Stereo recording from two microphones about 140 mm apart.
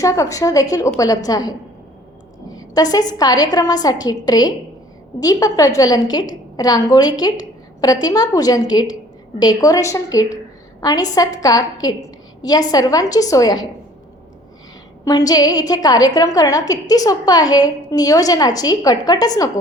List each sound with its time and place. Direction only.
0.0 s a woman's voice: 25° left (ahead or behind)
15.0 s a woman's voice: 25° left (ahead or behind)